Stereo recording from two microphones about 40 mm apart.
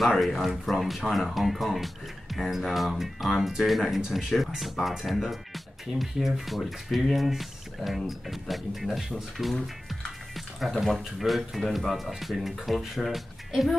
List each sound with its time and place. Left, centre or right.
0.0 s speech: centre
9.8 s music: centre
10.8 s speech: centre